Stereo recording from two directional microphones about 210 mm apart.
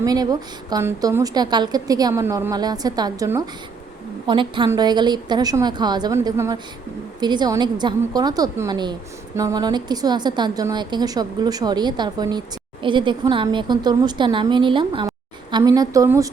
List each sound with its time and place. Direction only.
0.0 s a woman's voice: 15° right (ahead or behind)